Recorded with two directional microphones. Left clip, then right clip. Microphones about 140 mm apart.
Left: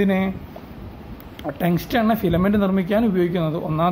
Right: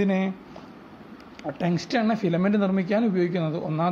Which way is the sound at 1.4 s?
25° right (ahead or behind).